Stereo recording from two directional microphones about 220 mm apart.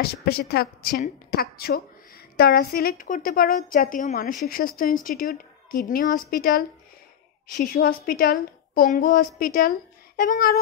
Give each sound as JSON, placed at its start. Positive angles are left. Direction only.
{"t": 0.0, "sound": "a woman's voice", "side_deg": 45}